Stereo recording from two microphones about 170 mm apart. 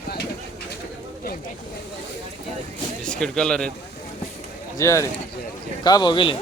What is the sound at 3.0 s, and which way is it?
Speech, 5° left (ahead or behind).